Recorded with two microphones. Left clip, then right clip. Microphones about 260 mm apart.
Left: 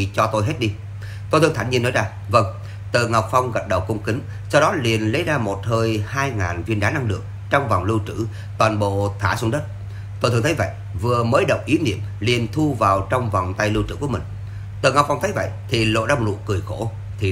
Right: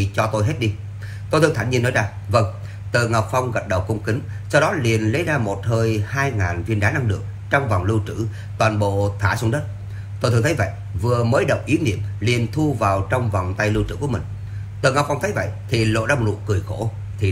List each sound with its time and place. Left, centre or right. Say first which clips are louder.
0.0 s a man's voice: left 2 dB; centre